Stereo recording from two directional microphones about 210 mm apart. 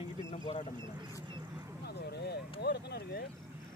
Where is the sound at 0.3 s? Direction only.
35° left (ahead or behind).